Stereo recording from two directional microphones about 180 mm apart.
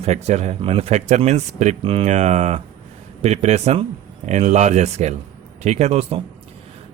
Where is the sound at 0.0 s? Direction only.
35° right (ahead or behind).